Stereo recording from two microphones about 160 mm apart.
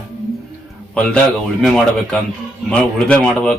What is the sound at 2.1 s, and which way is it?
A man's voice, 5° left (ahead or behind).